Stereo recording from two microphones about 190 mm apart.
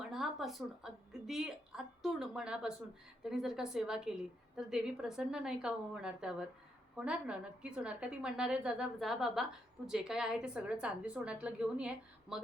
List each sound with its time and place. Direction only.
0.0 s a woman's voice: centre (ahead or behind)